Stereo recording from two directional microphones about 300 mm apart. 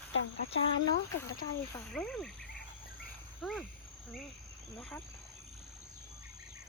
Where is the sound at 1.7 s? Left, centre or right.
Centre.